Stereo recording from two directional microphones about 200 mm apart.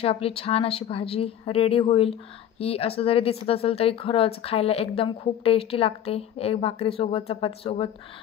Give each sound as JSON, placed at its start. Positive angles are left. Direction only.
{"t": 0.0, "sound": "speech", "side_deg": 30}